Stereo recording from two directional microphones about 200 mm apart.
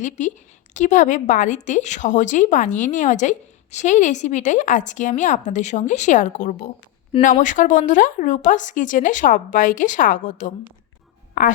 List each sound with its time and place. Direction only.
0.0 s a woman's voice: 40° left (ahead or behind)